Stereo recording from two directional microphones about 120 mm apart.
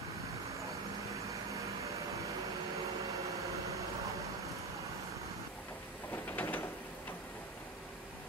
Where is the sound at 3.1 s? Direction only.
25° right (ahead or behind).